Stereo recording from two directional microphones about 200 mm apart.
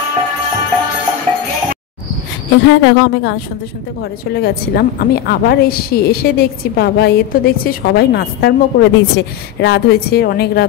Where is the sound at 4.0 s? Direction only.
50° left (ahead or behind).